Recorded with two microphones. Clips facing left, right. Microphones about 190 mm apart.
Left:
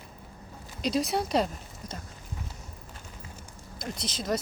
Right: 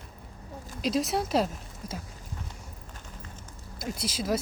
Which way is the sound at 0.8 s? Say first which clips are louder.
Even; centre (ahead or behind).